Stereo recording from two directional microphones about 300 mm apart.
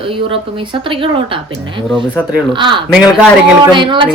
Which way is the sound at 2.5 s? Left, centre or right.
Centre.